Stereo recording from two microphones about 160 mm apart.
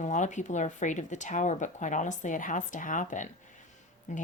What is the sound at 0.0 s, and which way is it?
A woman's voice, 50° left (ahead or behind).